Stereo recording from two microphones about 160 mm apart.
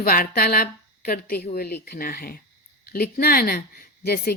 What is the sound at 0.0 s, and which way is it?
A woman's voice, 65° left (ahead or behind).